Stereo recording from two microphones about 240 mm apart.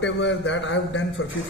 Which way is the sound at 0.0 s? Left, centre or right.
Left.